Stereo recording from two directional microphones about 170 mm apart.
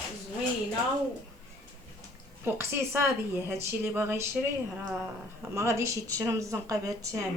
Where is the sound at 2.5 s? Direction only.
15° right (ahead or behind).